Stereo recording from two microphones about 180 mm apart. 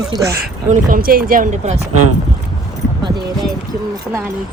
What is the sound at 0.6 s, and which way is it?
Speech, 50° right (ahead or behind).